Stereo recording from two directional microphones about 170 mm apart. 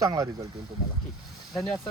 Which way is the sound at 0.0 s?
20° right (ahead or behind).